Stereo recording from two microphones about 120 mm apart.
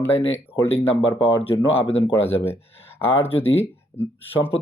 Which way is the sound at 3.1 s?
55° left (ahead or behind).